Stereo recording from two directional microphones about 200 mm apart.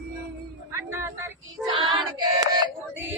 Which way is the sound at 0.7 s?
15° right (ahead or behind).